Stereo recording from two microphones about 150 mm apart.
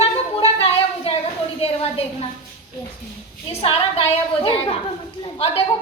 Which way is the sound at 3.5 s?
45° left (ahead or behind).